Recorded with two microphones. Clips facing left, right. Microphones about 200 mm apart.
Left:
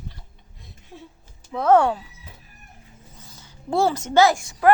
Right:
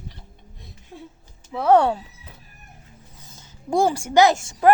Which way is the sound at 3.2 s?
20° right (ahead or behind).